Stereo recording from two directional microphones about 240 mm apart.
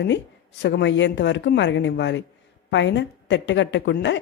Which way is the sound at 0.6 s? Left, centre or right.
Left.